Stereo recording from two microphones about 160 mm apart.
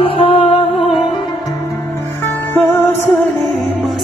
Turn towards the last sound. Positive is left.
turn(degrees=15)  # may be behind; listen again after turning